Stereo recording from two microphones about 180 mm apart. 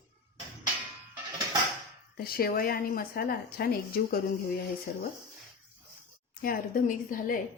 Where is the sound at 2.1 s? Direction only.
55° left (ahead or behind).